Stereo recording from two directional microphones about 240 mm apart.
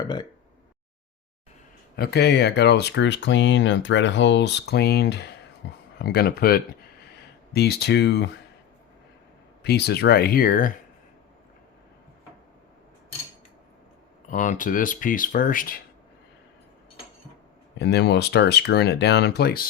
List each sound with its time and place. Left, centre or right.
0.0 s speech: centre
2.0 s speech: left
9.6 s speech: left
14.3 s speech: left
17.7 s speech: left